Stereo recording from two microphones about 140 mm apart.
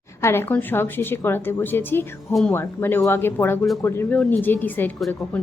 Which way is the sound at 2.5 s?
15° left (ahead or behind).